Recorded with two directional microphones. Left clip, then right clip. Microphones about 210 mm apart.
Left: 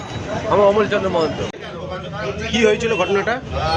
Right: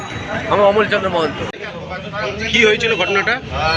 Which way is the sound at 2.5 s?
30° left (ahead or behind).